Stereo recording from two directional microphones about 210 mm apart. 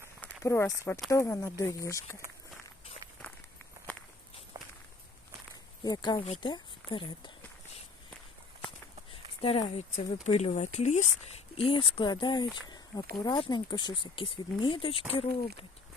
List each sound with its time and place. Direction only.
0.2 s speech: 10° left (ahead or behind)
5.8 s speech: 20° left (ahead or behind)
9.4 s speech: 25° left (ahead or behind)